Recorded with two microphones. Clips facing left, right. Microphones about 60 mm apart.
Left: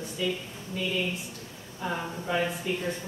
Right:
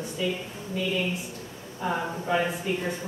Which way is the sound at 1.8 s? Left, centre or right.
Centre.